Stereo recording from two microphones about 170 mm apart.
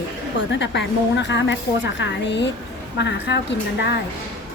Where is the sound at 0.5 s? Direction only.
90° left.